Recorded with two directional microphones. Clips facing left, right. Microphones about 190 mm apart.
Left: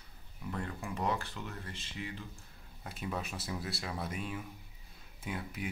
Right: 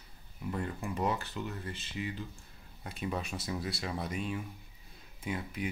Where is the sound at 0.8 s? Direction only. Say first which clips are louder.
Right 1 dB; 5° right (ahead or behind).